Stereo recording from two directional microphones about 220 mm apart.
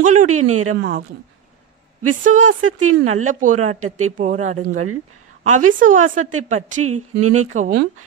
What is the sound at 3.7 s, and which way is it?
Speech, 75° right (ahead or behind).